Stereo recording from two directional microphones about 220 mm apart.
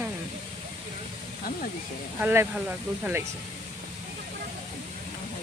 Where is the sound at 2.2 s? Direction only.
10° right (ahead or behind).